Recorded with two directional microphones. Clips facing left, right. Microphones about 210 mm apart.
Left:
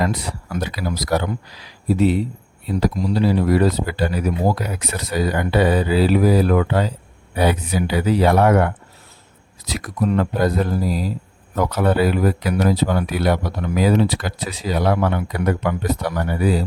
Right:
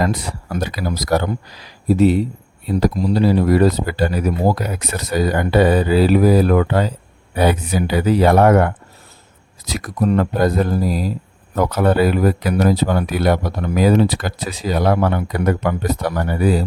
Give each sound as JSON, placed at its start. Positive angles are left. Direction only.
{"t": 0.0, "sound": "speech", "side_deg": -45}